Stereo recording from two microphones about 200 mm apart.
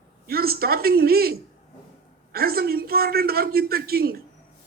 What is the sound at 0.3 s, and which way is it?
A woman's voice, 50° right (ahead or behind).